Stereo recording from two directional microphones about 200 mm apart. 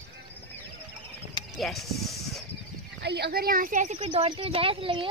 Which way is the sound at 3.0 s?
55° right (ahead or behind).